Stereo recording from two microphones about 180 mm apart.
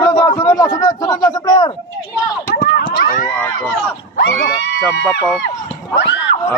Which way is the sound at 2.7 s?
60° left (ahead or behind).